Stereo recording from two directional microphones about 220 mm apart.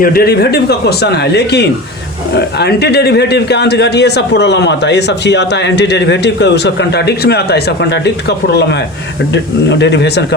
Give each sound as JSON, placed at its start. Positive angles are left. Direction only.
{"t": 0.0, "sound": "speech", "side_deg": 45}